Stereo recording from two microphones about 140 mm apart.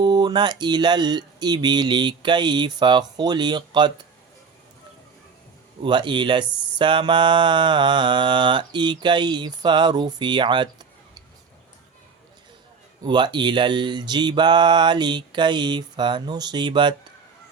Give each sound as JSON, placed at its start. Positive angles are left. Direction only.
{"t": 0.0, "sound": "mantra", "side_deg": -30}
{"t": 5.8, "sound": "mantra", "side_deg": -35}
{"t": 13.0, "sound": "mantra", "side_deg": -35}